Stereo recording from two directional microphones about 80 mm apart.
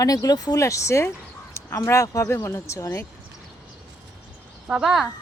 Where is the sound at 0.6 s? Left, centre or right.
Left.